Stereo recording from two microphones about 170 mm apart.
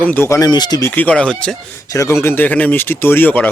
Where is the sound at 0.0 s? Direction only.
10° left (ahead or behind).